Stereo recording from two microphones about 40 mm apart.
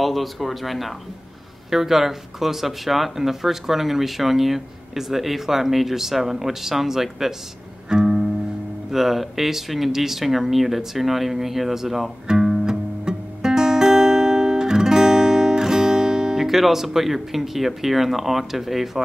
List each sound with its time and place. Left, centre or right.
0.0 s speech: centre
7.9 s music: centre
8.9 s speech: centre
12.3 s guitar: centre
16.4 s speech: centre